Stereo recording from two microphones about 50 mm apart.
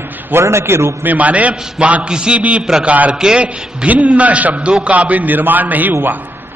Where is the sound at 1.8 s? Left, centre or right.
Right.